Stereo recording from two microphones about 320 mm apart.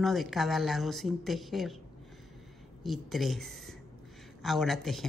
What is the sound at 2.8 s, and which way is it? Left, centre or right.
A woman's voice, centre.